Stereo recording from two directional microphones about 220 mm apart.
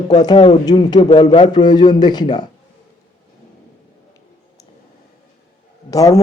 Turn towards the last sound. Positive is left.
turn(degrees=15)  # may be behind; listen again after turning